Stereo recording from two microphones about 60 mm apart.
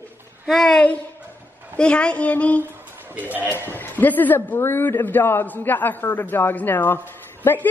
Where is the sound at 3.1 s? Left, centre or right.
Right.